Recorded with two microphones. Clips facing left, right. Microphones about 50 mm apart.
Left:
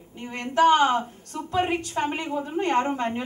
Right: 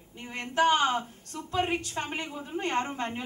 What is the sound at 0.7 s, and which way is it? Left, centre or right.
A woman's voice, centre.